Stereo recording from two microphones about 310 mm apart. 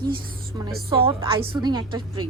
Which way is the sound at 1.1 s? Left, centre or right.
Centre.